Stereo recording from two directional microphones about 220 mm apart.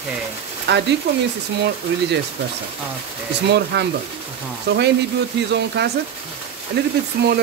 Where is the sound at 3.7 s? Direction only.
50° right (ahead or behind).